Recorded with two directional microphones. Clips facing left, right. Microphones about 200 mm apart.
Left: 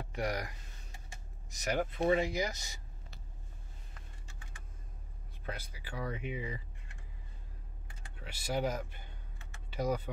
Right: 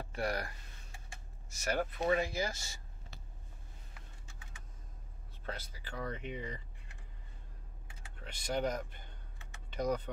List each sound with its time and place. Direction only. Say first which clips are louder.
0.0 s speech: even; 15° left (ahead or behind)
5.4 s speech: left 1 dB; 10° left (ahead or behind)
8.2 s speech: left 1 dB; 5° left (ahead or behind)